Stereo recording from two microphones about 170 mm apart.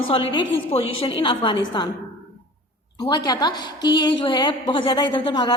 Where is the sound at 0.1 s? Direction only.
30° left (ahead or behind).